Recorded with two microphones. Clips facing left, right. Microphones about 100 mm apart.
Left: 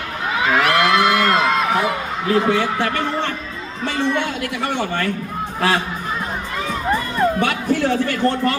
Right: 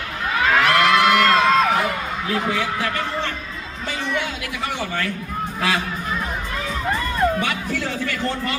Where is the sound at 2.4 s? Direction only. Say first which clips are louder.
Left 5 dB; 60° left (ahead or behind).